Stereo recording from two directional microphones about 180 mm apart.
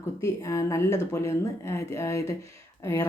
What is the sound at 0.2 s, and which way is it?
Speech, 15° left (ahead or behind).